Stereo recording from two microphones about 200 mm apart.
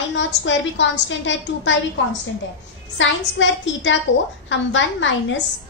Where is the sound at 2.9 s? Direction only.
70° left (ahead or behind).